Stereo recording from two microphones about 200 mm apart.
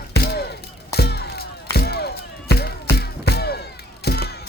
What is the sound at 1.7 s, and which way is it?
Music, 55° left (ahead or behind).